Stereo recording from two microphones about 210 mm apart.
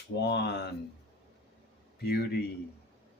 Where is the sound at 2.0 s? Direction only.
50° left (ahead or behind).